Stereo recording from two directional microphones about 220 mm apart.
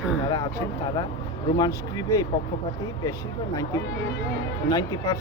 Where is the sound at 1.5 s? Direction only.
15° left (ahead or behind).